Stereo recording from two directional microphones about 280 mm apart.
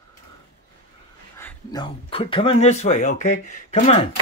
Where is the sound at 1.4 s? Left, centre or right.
Centre.